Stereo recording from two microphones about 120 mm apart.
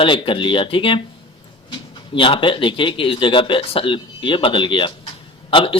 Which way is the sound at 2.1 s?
45° left (ahead or behind).